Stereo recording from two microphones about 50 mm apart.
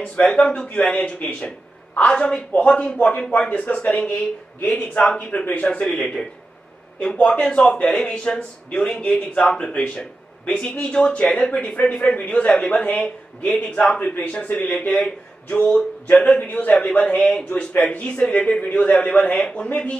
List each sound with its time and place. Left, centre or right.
0.2 s a man's voice: centre
4.1 s speech: left
4.7 s a man's voice: left
5.9 s a man's voice: centre
13.7 s a man's voice: centre
14.3 s a man's voice: left
15.7 s a man's voice: left
16.4 s a man's voice: left
18.3 s a man's voice: centre